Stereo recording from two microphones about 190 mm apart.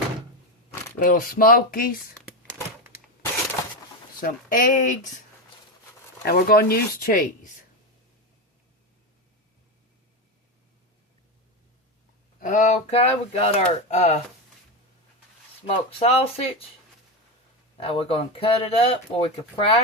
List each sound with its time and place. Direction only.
0.9 s speech: 50° left (ahead or behind)
4.2 s speech: 45° left (ahead or behind)
6.2 s speech: 55° left (ahead or behind)
12.4 s speech: 40° left (ahead or behind)
15.6 s speech: 30° left (ahead or behind)
17.7 s speech: 30° left (ahead or behind)